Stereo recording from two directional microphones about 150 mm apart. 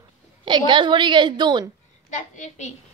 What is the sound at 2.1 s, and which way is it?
Speech, 55° left (ahead or behind).